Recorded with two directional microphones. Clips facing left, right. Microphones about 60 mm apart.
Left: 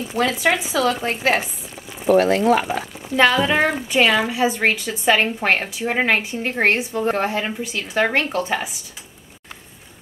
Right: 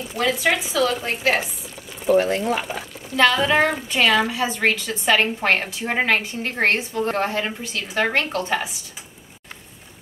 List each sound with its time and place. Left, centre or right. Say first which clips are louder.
0.2 s a woman's voice: left 1 dB; centre
2.0 s speech: left 4 dB; left
3.2 s a woman's voice: left 1 dB; centre